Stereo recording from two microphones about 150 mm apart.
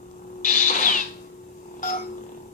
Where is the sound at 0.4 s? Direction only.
60° left (ahead or behind).